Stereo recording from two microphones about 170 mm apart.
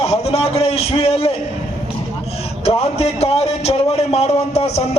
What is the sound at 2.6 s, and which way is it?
A man's voice, 40° left (ahead or behind).